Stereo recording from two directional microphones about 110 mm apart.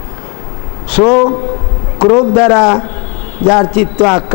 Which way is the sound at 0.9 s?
20° left (ahead or behind).